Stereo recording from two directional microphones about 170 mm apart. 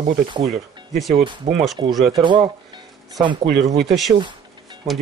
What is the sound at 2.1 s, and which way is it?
Speech, 25° right (ahead or behind).